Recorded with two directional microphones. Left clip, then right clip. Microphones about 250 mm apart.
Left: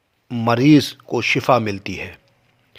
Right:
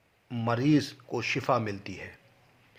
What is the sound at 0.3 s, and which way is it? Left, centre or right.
A man's voice, left.